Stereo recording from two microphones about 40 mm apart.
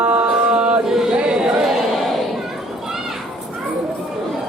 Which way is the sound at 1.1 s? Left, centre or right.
Right.